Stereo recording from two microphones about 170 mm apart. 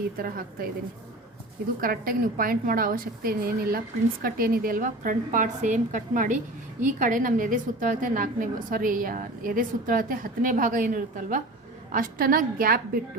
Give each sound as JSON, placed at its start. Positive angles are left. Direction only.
{"t": 0.2, "sound": "a woman's voice", "side_deg": -60}
{"t": 1.8, "sound": "a woman's voice", "side_deg": -55}